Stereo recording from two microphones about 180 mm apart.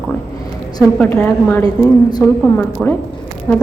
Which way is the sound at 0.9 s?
10° left (ahead or behind).